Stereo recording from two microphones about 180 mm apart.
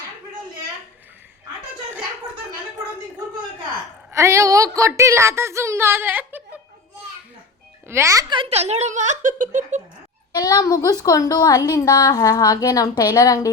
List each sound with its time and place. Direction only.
4.1 s a woman's voice: 15° right (ahead or behind)
7.9 s speech: 15° right (ahead or behind); by 9.8 s 45° right (ahead or behind)
10.3 s a woman's voice: 20° left (ahead or behind)